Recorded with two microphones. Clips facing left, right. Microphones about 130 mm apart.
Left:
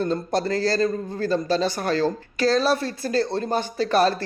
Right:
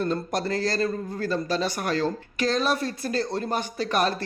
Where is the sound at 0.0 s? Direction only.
30° left (ahead or behind).